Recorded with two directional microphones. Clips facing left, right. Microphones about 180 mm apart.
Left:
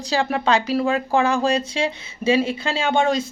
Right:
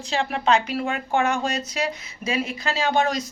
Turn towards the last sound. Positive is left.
turn(degrees=25)  # may be behind; listen again after turning